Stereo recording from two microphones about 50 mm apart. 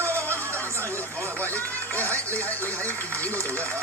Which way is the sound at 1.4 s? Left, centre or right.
Left.